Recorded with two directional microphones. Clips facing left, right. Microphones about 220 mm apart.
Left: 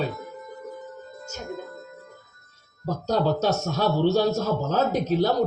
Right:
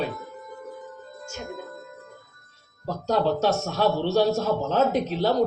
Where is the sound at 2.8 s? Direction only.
40° left (ahead or behind).